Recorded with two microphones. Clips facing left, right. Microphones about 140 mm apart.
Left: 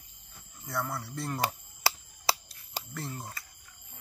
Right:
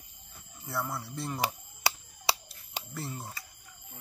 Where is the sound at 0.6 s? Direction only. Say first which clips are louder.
Even; centre (ahead or behind).